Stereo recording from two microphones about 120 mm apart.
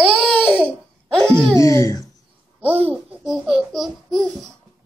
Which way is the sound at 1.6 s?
25° left (ahead or behind).